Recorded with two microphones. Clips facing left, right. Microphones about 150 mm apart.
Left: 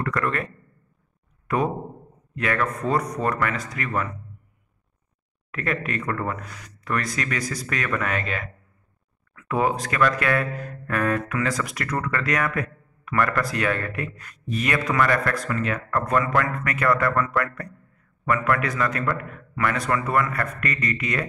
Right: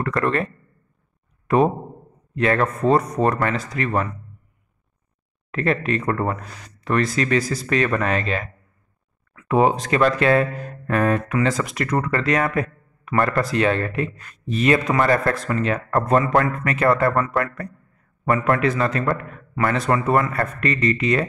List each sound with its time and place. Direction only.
0.0 s speech: 30° right (ahead or behind)
1.5 s speech: 25° right (ahead or behind)
5.5 s speech: 30° right (ahead or behind)